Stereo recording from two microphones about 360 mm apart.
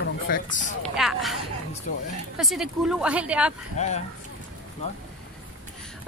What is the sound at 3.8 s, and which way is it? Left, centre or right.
Speech, centre.